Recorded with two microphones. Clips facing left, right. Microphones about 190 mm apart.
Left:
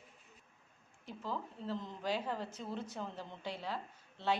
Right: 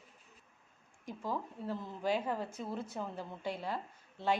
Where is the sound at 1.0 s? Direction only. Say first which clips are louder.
Right 3 dB; 15° right (ahead or behind).